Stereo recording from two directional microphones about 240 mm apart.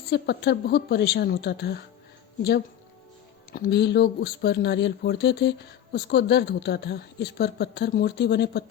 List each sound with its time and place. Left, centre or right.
0.1 s speech: left
3.5 s speech: left